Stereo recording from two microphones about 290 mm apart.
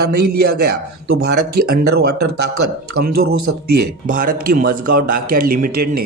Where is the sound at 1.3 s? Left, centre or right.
Right.